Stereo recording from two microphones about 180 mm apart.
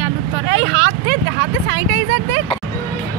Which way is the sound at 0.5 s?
90° right.